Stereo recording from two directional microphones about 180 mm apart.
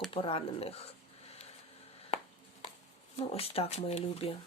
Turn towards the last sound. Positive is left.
turn(degrees=35)  # may be behind; listen again after turning